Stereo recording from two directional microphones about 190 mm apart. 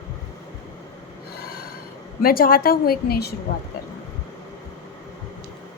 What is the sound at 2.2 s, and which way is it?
A woman's voice, 50° left (ahead or behind).